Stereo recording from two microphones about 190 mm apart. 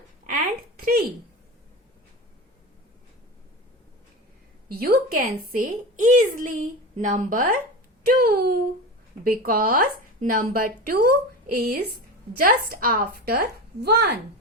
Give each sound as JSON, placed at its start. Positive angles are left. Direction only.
{"t": 0.8, "sound": "speech", "side_deg": -50}
{"t": 4.8, "sound": "a woman's voice", "side_deg": -50}